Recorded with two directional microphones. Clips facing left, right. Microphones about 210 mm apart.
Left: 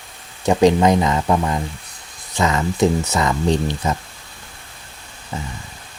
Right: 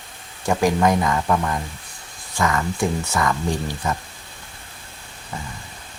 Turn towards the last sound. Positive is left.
turn(degrees=20)  # may be behind; listen again after turning